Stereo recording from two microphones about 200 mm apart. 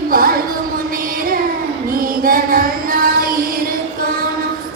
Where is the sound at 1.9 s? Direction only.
45° right (ahead or behind).